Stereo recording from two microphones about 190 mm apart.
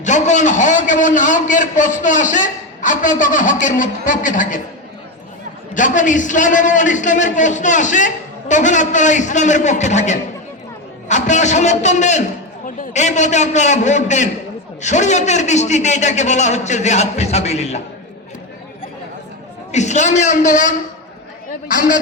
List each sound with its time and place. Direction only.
0.0 s a man's voice: 40° left (ahead or behind)
5.7 s a man's voice: 40° left (ahead or behind)
19.7 s a man's voice: 40° left (ahead or behind)